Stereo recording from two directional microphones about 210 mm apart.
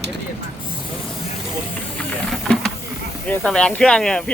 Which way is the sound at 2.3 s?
Centre (ahead or behind).